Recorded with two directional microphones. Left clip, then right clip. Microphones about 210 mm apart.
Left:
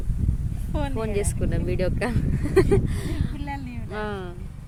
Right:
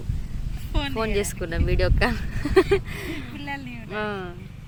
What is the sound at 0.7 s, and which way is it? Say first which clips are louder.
Speech: right 1 dB; 45° left (ahead or behind).